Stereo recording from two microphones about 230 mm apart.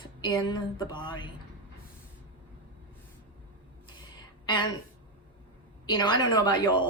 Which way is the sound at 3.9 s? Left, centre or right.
Centre.